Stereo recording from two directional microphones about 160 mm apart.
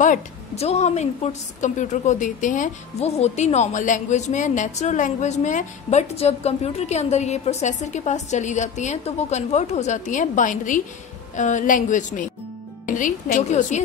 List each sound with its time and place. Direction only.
0.0 s a woman's voice: 45° left (ahead or behind)